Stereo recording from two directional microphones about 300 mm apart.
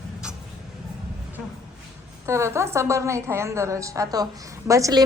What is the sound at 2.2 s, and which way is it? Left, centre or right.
A woman's voice, centre.